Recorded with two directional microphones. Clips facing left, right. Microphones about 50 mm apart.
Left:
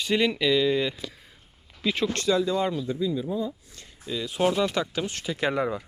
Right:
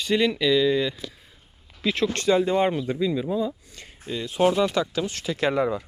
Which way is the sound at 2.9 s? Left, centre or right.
Right.